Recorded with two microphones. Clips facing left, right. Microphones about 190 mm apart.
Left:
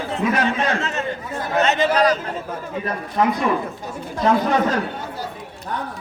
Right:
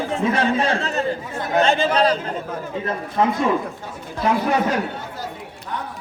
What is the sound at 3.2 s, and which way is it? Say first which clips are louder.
Speech: even; 25° right (ahead or behind).